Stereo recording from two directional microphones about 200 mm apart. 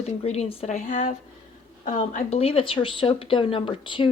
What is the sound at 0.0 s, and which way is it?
A woman's voice, 30° left (ahead or behind).